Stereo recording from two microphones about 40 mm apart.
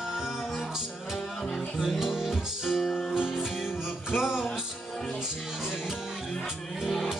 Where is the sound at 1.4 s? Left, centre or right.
Centre.